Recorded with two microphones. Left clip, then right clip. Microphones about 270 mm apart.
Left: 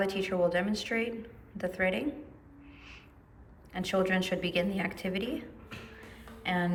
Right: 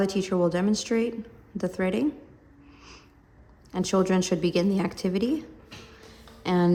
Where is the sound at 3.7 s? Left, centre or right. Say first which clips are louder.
Right 5 dB; right.